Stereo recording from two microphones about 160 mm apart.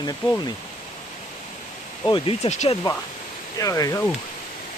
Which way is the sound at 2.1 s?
40° left (ahead or behind).